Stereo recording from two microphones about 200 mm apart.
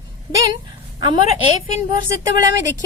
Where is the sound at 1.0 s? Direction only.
25° right (ahead or behind).